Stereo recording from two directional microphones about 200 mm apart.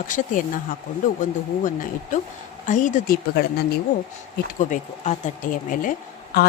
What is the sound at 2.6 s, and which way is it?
Speech, 40° left (ahead or behind).